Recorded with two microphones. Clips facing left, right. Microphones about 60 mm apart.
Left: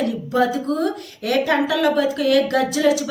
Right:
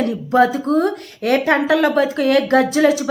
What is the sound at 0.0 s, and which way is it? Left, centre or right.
A woman's voice, right.